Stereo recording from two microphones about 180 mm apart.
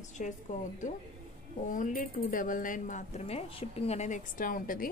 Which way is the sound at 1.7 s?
50° left (ahead or behind).